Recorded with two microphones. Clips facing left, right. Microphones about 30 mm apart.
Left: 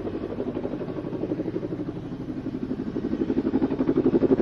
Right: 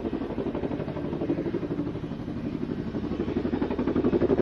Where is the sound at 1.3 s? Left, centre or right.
Centre.